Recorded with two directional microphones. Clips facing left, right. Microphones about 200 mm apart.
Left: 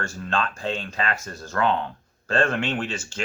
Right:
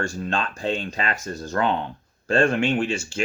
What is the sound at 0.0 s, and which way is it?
Speech, 15° right (ahead or behind).